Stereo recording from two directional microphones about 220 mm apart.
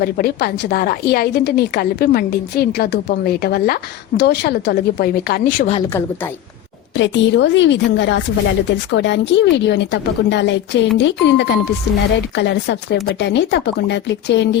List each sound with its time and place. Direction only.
0.0 s a woman's voice: 45° left (ahead or behind)
6.9 s a woman's voice: 55° left (ahead or behind)